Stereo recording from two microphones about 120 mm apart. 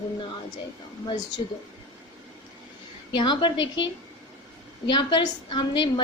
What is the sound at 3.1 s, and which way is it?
Speech, 40° left (ahead or behind).